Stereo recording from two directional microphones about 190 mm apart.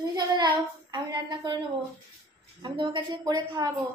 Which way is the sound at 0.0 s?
20° right (ahead or behind).